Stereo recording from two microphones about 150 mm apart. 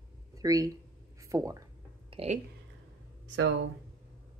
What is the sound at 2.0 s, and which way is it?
Speech, 45° right (ahead or behind).